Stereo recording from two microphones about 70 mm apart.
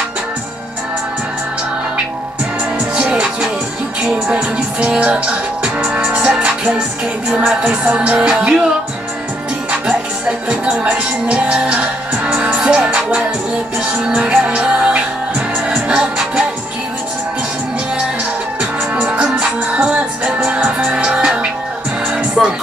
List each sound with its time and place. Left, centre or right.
3.0 s music: centre
10.5 s music: centre
18.6 s music: centre
22.4 s music: centre